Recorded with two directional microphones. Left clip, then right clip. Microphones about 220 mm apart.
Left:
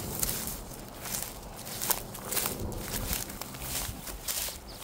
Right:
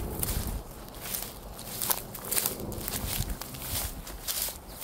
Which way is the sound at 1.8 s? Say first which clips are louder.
Even; centre (ahead or behind).